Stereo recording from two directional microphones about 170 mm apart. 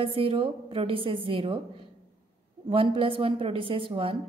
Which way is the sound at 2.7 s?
35° right (ahead or behind).